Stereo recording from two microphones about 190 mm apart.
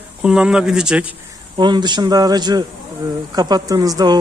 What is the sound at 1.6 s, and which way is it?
Speech, 25° right (ahead or behind).